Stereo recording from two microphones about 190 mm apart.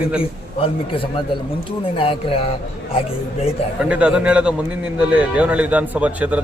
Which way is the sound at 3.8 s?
5° right (ahead or behind).